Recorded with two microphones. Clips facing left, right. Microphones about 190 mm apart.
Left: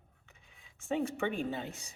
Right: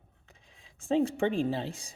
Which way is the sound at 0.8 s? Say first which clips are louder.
Right 6 dB; 30° right (ahead or behind).